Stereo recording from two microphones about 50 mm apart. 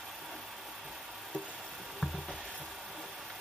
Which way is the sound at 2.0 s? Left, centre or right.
Centre.